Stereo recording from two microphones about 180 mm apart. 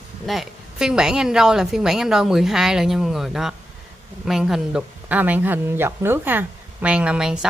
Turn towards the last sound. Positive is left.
turn(degrees=-5)  # may be behind; listen again after turning